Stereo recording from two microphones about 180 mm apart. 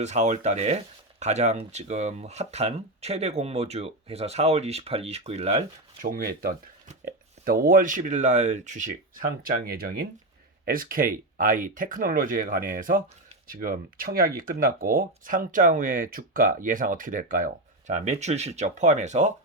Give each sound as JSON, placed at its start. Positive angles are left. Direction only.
{"t": 0.0, "sound": "speech", "side_deg": -40}